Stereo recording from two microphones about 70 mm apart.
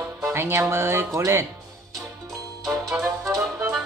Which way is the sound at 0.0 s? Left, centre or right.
Right.